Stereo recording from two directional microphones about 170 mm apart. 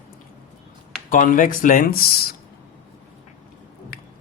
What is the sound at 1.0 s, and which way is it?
Speech, 50° left (ahead or behind).